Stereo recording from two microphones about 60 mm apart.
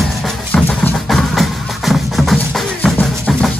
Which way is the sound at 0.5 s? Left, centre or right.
Left.